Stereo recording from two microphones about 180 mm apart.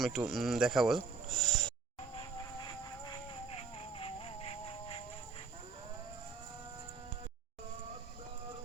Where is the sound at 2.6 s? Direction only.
20° left (ahead or behind).